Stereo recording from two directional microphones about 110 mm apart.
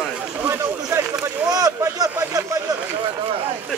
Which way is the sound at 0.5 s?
25° right (ahead or behind).